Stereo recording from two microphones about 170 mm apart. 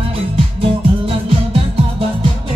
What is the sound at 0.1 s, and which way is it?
Music, 35° right (ahead or behind).